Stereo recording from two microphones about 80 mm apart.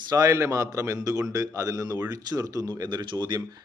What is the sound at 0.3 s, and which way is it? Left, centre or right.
A man's voice, right.